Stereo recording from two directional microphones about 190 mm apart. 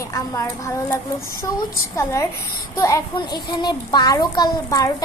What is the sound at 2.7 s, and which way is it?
A child's voice, 15° left (ahead or behind).